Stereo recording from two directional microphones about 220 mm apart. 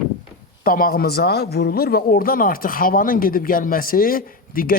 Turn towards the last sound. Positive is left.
turn(degrees=40)  # may be behind; listen again after turning